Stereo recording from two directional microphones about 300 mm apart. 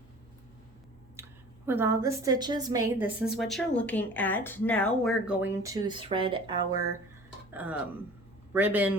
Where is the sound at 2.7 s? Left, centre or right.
Left.